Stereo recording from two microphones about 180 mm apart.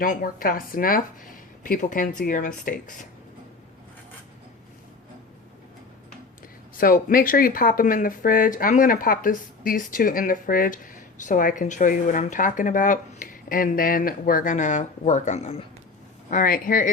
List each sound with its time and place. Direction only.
0.0 s speech: 50° left (ahead or behind)
6.7 s speech: 50° left (ahead or behind); by 15.6 s 35° left (ahead or behind)
16.3 s speech: 50° left (ahead or behind)